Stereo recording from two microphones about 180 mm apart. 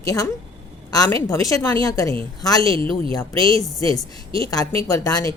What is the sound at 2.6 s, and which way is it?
A woman's voice, 30° right (ahead or behind).